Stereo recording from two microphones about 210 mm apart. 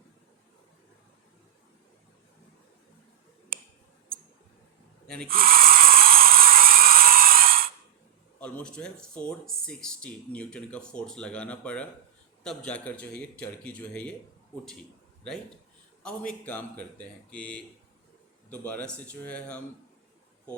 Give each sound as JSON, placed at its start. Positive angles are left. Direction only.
{"t": 5.0, "sound": "speech", "side_deg": 5}
{"t": 5.3, "sound": "a sound", "side_deg": -45}
{"t": 8.4, "sound": "speech", "side_deg": 5}
{"t": 16.5, "sound": "speech", "side_deg": 10}